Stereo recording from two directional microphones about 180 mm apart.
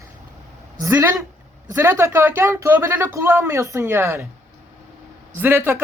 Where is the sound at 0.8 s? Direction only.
20° right (ahead or behind).